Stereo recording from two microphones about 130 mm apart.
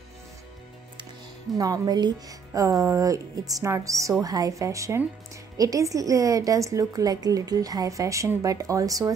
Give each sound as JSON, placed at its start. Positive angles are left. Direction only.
{"t": 1.6, "sound": "a woman's voice", "side_deg": -30}